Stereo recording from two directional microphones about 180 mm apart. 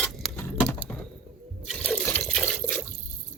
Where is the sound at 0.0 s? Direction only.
5° left (ahead or behind).